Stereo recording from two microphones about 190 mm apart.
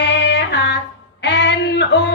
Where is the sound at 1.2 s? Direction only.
65° left (ahead or behind).